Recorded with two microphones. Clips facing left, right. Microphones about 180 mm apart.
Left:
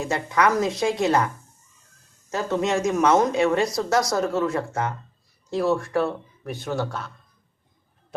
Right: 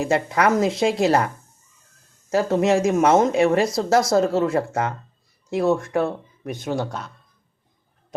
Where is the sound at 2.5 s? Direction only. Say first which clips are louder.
Right 3 dB; 25° right (ahead or behind).